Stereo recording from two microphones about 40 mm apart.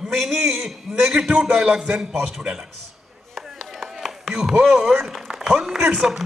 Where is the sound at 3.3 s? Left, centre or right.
Centre.